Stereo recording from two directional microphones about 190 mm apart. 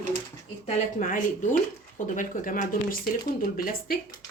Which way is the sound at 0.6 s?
40° left (ahead or behind).